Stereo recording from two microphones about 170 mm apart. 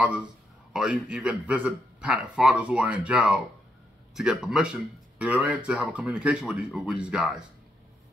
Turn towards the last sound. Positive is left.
turn(degrees=-5)  # may be behind; listen again after turning